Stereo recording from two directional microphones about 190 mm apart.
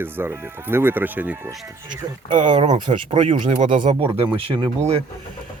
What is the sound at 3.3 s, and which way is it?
Speech, 40° right (ahead or behind).